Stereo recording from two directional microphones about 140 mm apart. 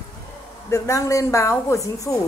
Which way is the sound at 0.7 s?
25° left (ahead or behind).